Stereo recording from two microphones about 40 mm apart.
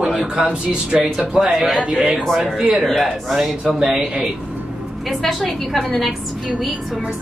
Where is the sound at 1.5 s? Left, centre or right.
Centre.